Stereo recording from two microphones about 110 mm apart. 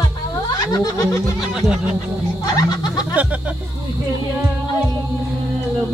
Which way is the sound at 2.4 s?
35° left (ahead or behind).